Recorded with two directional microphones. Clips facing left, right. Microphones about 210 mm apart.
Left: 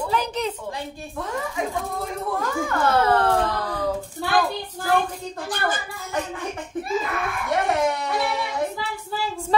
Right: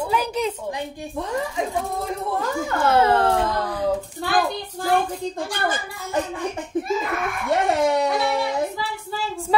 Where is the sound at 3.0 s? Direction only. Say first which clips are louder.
Right 1 dB; 20° right (ahead or behind).